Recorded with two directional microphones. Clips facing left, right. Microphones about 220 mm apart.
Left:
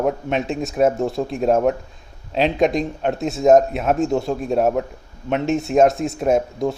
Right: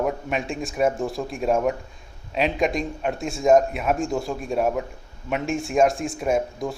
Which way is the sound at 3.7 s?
30° left (ahead or behind).